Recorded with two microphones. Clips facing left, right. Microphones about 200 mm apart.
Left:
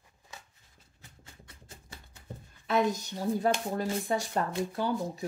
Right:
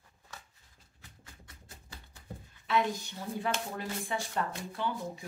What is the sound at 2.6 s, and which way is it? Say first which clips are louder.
Speech: left 3 dB; 40° left (ahead or behind).